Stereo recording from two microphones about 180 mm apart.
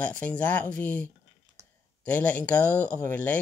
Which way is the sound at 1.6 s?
15° right (ahead or behind).